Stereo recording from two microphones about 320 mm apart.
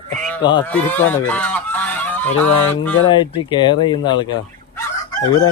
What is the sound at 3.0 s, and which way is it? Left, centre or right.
Speech, centre.